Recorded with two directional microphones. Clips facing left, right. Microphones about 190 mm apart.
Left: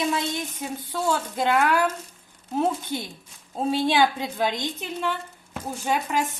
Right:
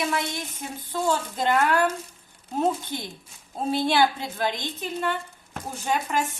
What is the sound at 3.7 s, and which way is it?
A woman's voice, 15° left (ahead or behind).